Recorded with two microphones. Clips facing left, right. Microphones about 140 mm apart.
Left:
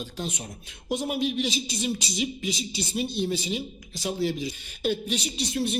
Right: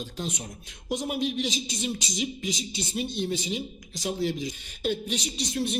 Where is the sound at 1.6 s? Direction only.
35° left (ahead or behind).